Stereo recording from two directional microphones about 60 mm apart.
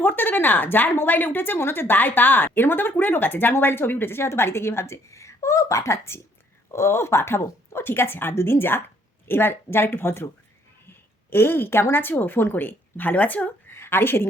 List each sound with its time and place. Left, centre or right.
0.0 s a woman's voice: left
13.7 s a woman's voice: left